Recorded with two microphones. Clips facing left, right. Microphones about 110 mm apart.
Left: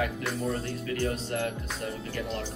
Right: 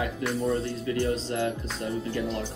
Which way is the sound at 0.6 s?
20° right (ahead or behind).